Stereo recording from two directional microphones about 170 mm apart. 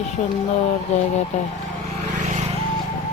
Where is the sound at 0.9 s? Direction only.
40° left (ahead or behind).